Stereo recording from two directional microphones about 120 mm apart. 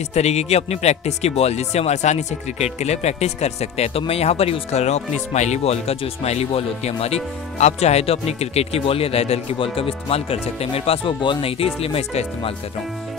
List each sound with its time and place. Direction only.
0.1 s speech: 65° left (ahead or behind)